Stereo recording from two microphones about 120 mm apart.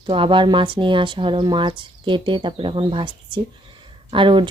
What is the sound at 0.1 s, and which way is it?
Speech, 45° right (ahead or behind).